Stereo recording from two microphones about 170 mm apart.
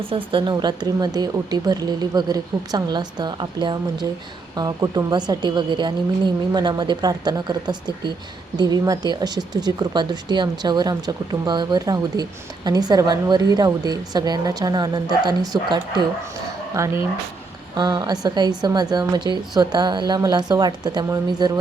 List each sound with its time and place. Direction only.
0.1 s a woman's voice: 30° right (ahead or behind)